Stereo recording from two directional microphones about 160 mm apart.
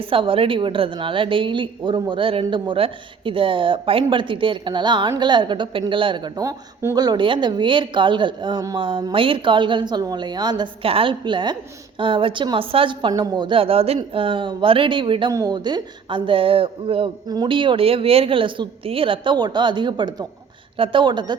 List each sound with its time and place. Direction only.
0.1 s a woman's voice: 35° right (ahead or behind)